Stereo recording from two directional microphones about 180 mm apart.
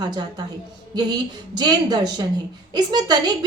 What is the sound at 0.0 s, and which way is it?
A woman's voice, 25° right (ahead or behind).